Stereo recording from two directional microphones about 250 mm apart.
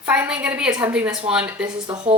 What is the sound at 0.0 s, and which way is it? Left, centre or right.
Speech, centre.